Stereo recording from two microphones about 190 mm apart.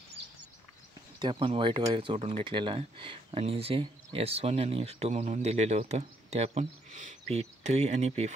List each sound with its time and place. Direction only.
1.2 s speech: 30° right (ahead or behind)